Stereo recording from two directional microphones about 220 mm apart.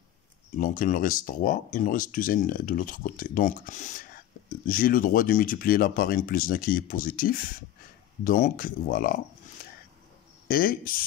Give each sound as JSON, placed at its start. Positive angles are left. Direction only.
{"t": 0.6, "sound": "speech", "side_deg": 35}
{"t": 10.5, "sound": "speech", "side_deg": 40}